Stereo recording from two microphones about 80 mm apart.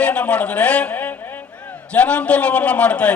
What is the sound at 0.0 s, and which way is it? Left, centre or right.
A man's voice, centre.